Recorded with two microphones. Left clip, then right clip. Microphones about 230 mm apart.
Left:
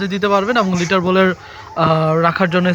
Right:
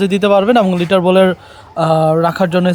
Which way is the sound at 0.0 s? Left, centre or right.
Right.